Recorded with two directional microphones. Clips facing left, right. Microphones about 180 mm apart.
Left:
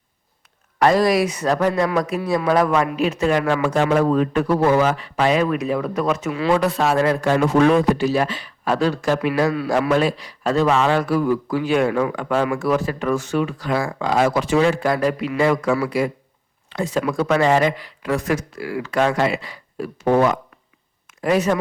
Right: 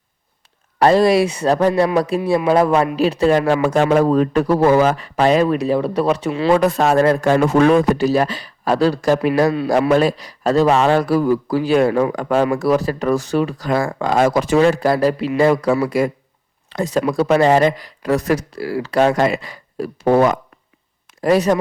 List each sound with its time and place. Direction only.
0.8 s a man's voice: 30° right (ahead or behind)
6.6 s a man's voice: 45° right (ahead or behind)